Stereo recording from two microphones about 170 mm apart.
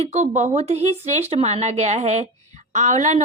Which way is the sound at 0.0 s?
40° right (ahead or behind).